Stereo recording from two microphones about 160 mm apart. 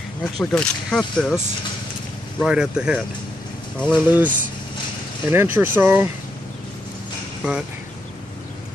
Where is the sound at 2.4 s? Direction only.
5° right (ahead or behind).